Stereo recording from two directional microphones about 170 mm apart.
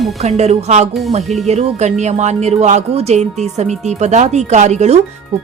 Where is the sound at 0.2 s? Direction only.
40° right (ahead or behind).